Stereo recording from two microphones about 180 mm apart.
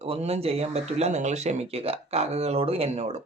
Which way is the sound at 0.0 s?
35° right (ahead or behind).